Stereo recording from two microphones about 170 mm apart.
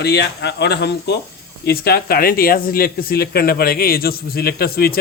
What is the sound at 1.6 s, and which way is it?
Speech, 65° left (ahead or behind).